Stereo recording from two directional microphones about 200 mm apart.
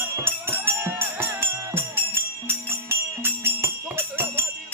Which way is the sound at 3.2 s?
10° right (ahead or behind).